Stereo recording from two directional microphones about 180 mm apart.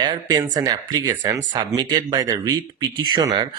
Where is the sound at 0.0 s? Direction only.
25° right (ahead or behind).